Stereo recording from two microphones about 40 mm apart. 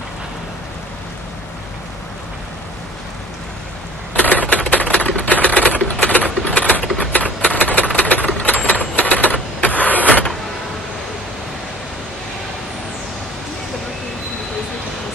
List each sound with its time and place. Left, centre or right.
4.1 s typewriter: left
6.0 s coin: left
6.4 s a sound: left
7.0 s typewriter: left